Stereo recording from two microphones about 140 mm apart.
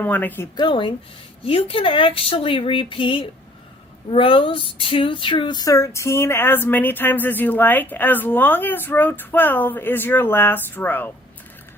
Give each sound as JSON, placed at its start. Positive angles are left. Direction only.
{"t": 0.0, "sound": "speech", "side_deg": 10}
{"t": 0.5, "sound": "speech", "side_deg": 35}